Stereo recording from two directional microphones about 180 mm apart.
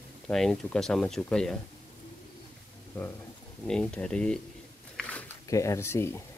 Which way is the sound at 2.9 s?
10° left (ahead or behind).